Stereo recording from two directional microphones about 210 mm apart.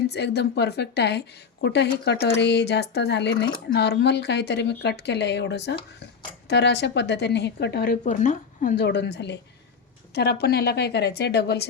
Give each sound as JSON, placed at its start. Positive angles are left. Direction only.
{"t": 0.1, "sound": "speech", "side_deg": 50}
{"t": 8.7, "sound": "a woman's voice", "side_deg": 55}